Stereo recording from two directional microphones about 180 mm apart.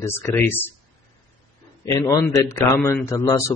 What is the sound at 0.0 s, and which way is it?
Speech, 15° left (ahead or behind).